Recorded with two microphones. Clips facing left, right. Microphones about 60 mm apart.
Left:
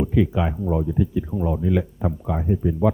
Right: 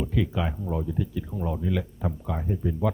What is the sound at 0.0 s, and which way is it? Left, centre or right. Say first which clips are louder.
Speech: left 7 dB; centre.